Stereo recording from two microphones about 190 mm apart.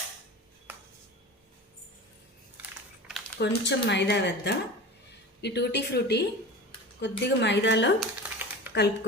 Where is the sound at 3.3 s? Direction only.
60° left (ahead or behind).